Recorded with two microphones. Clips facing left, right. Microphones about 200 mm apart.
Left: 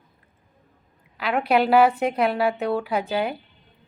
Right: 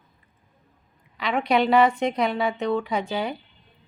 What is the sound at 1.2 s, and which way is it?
A woman's voice, 5° left (ahead or behind).